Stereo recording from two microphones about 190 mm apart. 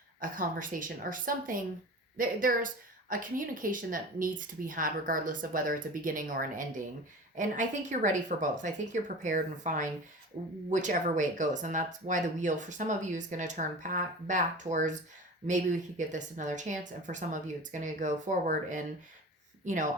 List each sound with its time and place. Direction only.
0.2 s speech: 45° right (ahead or behind)